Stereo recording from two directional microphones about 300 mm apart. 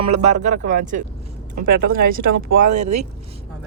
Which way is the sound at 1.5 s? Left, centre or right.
Right.